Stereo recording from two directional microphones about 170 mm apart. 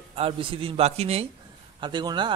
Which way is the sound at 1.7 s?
25° right (ahead or behind).